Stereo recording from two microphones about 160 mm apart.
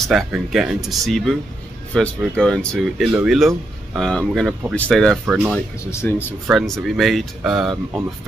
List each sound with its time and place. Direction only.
0.0 s speech: centre (ahead or behind)
5.2 s speech: 10° right (ahead or behind)
5.9 s speech: 15° left (ahead or behind)
6.5 s speech: centre (ahead or behind)